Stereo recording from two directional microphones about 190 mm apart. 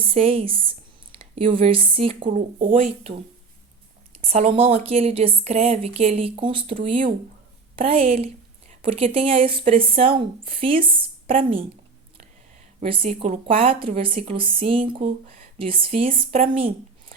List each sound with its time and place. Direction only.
0.0 s speech: 30° right (ahead or behind)
7.8 s a woman's voice: 30° right (ahead or behind)
16.0 s a woman's voice: 45° right (ahead or behind)